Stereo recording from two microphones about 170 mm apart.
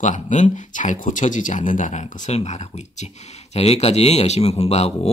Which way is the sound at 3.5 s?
40° left (ahead or behind).